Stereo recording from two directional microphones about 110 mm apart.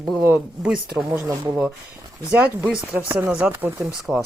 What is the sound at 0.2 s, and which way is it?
Speech, 20° right (ahead or behind).